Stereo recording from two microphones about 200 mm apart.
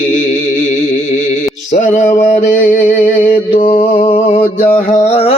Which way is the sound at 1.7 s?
40° left (ahead or behind).